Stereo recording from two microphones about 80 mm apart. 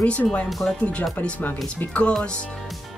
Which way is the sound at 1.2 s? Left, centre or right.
Centre.